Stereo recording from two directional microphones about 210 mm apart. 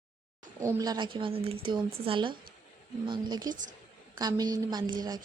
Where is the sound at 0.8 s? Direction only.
20° right (ahead or behind).